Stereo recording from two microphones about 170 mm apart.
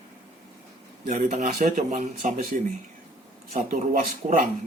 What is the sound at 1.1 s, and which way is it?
Speech, 50° right (ahead or behind).